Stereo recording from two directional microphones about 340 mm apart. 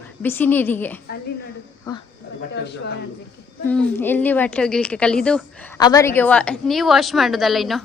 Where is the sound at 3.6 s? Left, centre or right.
Centre.